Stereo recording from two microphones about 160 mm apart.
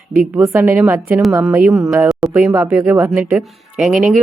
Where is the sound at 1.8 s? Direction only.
15° right (ahead or behind).